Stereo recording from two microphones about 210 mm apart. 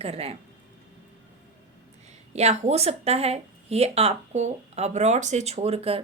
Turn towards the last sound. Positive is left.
turn(degrees=-30)  # may be behind; listen again after turning